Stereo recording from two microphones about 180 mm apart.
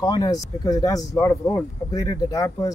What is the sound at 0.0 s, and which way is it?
Speech, 20° left (ahead or behind).